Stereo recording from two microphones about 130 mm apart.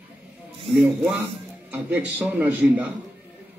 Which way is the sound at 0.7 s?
15° right (ahead or behind).